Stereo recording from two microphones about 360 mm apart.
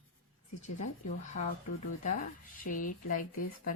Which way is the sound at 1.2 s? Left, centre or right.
Left.